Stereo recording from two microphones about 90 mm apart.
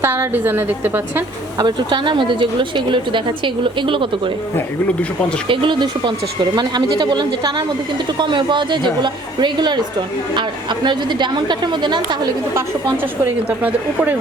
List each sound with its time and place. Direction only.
0.0 s a woman's voice: 25° right (ahead or behind)
1.5 s a woman's voice: 60° right (ahead or behind)
5.5 s a woman's voice: 60° right (ahead or behind)
13.6 s speech: 20° right (ahead or behind)